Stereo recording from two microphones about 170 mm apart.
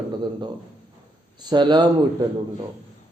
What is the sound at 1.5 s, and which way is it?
Speech, 25° right (ahead or behind).